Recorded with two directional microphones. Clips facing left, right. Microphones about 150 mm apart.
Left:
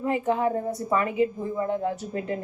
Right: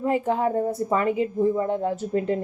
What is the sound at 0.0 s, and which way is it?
A woman's voice, 35° right (ahead or behind).